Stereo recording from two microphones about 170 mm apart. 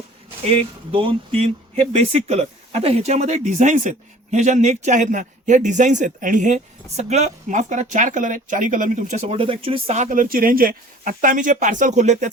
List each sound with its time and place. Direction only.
0.4 s speech: 35° right (ahead or behind)